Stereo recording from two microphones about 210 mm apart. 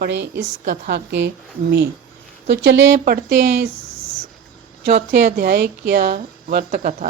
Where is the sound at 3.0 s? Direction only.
45° right (ahead or behind).